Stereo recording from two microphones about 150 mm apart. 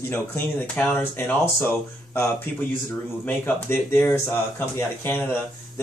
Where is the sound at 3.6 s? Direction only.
15° left (ahead or behind).